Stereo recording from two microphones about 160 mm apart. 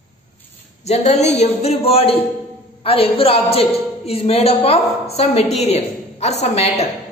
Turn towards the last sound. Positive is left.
turn(degrees=40)  # may be behind; listen again after turning